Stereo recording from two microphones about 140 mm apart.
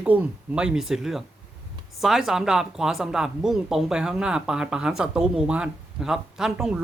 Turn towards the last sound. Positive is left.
turn(degrees=-5)  # may be behind; listen again after turning